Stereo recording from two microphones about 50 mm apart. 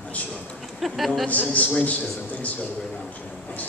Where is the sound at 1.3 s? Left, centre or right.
Left.